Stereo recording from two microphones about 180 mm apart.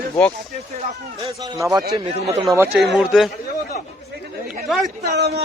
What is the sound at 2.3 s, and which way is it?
Speech, 20° right (ahead or behind).